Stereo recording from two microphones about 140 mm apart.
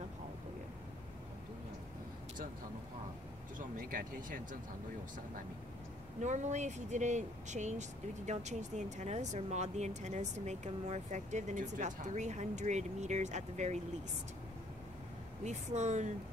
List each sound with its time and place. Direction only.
3.5 s speech: 75° right (ahead or behind)
6.2 s speech: 60° right (ahead or behind)
15.4 s speech: 55° right (ahead or behind)